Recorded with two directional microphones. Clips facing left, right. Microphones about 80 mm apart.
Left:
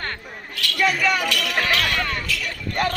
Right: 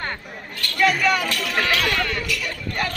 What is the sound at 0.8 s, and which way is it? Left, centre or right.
Speech, centre.